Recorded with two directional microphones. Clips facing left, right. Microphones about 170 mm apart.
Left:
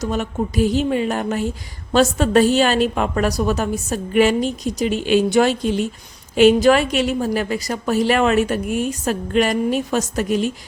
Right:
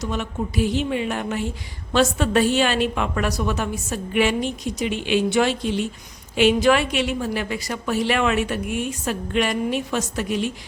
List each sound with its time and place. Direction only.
0.0 s a woman's voice: 40° left (ahead or behind)